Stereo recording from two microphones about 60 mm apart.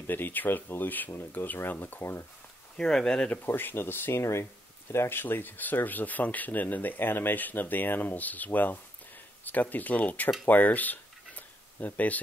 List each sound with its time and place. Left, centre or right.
0.0 s speech: left
2.8 s speech: centre
3.4 s speech: left
4.2 s speech: left
5.2 s speech: left
10.4 s tick-tock: left